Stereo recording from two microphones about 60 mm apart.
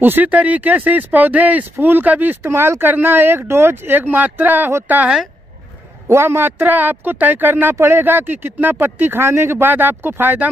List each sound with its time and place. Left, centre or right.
0.0 s speech: right
2.5 s speech: right
6.0 s speech: right